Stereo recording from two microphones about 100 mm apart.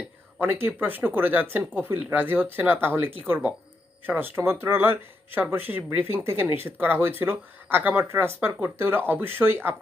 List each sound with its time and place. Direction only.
0.3 s speech: 20° right (ahead or behind)